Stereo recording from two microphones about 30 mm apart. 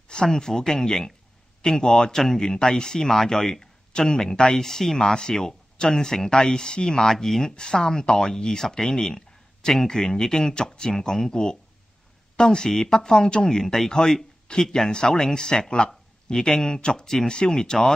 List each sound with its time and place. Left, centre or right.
0.1 s speech: left
6.5 s speech: left
7.1 s speech: centre
7.5 s speech: left